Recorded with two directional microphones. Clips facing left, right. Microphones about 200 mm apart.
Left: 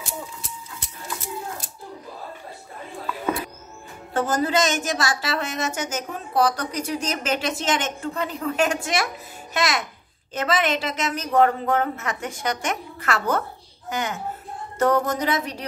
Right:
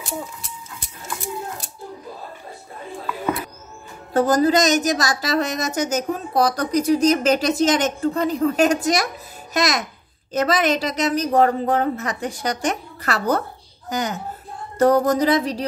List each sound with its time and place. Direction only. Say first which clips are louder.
4.1 s a woman's voice: right 6 dB; 40° right (ahead or behind)